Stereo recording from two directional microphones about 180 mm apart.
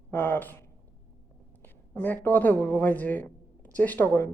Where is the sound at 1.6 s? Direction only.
10° left (ahead or behind).